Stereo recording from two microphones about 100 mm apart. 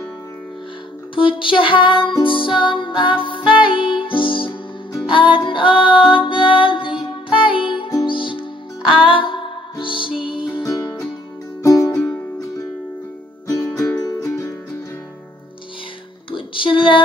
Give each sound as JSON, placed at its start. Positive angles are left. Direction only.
{"t": 1.1, "sound": "music", "side_deg": 60}
{"t": 8.8, "sound": "music", "side_deg": -10}
{"t": 9.1, "sound": "music", "side_deg": 55}
{"t": 10.6, "sound": "music", "side_deg": 35}
{"t": 13.5, "sound": "music", "side_deg": 30}
{"t": 16.3, "sound": "music", "side_deg": 60}